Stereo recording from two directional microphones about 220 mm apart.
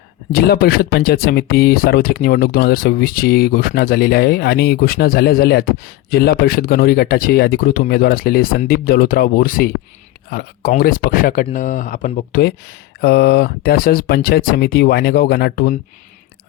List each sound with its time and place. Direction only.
0.3 s speech: 45° left (ahead or behind)